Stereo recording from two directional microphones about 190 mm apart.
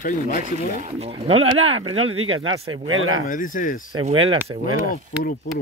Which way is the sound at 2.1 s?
90° right.